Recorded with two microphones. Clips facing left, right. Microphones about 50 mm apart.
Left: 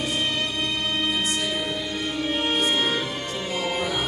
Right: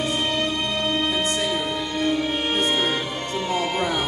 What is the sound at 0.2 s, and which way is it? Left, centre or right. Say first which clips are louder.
Music: right 2 dB; centre.